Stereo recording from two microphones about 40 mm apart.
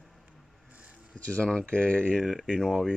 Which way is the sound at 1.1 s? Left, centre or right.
Left.